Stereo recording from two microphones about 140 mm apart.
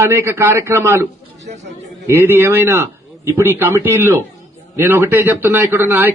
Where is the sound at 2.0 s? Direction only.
15° right (ahead or behind).